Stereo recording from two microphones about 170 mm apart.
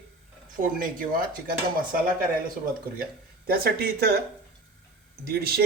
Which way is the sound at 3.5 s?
60° right (ahead or behind).